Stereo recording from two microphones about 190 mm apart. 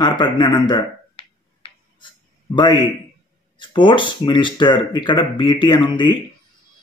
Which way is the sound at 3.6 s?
25° left (ahead or behind).